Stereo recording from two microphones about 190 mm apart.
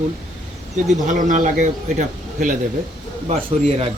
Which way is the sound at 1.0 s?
40° right (ahead or behind).